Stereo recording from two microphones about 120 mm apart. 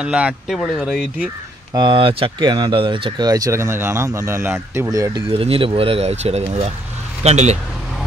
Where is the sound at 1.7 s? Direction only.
40° right (ahead or behind); by 4.8 s 20° right (ahead or behind).